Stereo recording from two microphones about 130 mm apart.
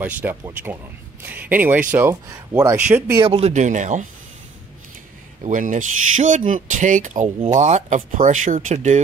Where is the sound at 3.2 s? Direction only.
50° right (ahead or behind).